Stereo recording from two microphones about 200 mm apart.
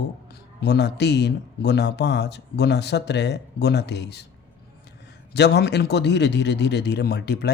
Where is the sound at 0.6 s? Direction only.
55° left (ahead or behind).